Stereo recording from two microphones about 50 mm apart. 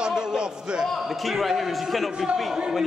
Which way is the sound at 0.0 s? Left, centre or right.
Centre.